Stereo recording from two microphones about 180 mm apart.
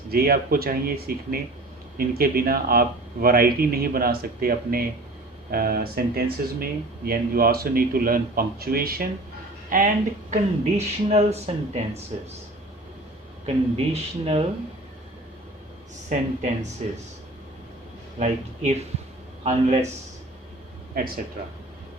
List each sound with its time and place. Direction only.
0.1 s speech: 55° right (ahead or behind); by 11.8 s 35° right (ahead or behind)
13.4 s speech: 35° right (ahead or behind)
16.1 s speech: 40° right (ahead or behind)
18.2 s speech: 40° right (ahead or behind)